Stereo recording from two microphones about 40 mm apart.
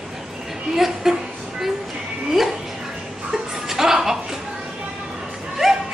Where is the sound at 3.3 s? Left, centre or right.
Centre.